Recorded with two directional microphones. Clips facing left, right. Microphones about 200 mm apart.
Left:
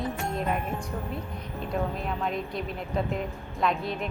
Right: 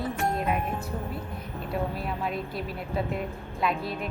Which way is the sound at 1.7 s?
5° right (ahead or behind).